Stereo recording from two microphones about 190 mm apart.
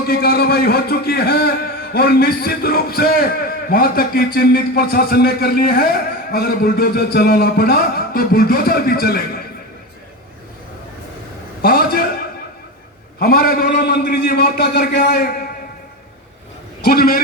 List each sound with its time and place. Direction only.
0.1 s a man's voice: 55° left (ahead or behind)
11.6 s a sound: 55° left (ahead or behind)
13.1 s a man's voice: 55° left (ahead or behind)
16.8 s a man's voice: 55° left (ahead or behind)